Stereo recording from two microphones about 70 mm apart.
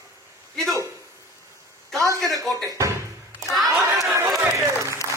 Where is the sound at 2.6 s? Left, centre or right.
Right.